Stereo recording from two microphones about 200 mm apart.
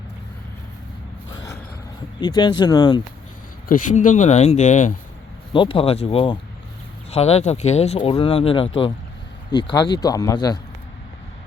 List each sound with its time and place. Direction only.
2.2 s speech: 20° left (ahead or behind)
3.7 s speech: 40° left (ahead or behind)
5.5 s speech: 25° left (ahead or behind)